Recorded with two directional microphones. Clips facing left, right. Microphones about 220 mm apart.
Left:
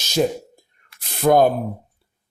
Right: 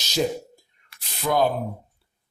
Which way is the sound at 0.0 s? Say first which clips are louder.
Left 4 dB; 50° left (ahead or behind).